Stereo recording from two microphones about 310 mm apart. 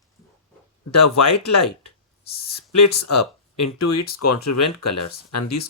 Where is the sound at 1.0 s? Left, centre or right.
Left.